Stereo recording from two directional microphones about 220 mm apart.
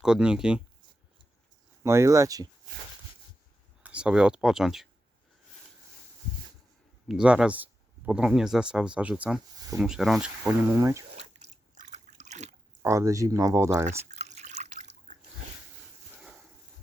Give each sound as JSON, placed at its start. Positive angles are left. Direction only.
{"t": 0.0, "sound": "speech", "side_deg": -5}
{"t": 1.8, "sound": "speech", "side_deg": -15}
{"t": 3.8, "sound": "speech", "side_deg": -5}
{"t": 7.1, "sound": "speech", "side_deg": -5}
{"t": 11.2, "sound": "drip", "side_deg": -30}
{"t": 12.8, "sound": "speech", "side_deg": -15}
{"t": 14.1, "sound": "drip", "side_deg": -30}